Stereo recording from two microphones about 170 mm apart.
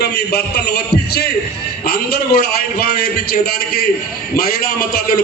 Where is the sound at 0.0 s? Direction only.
70° left (ahead or behind).